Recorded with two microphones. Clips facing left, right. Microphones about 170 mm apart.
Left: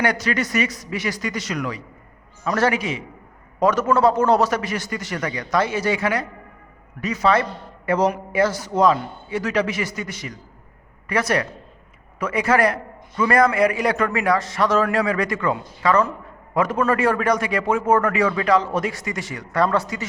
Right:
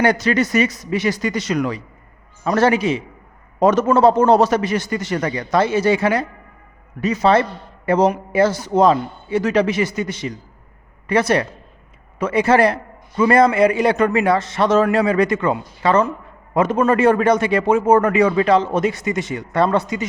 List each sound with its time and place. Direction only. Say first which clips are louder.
0.0 s a man's voice: right 5 dB; 25° right (ahead or behind)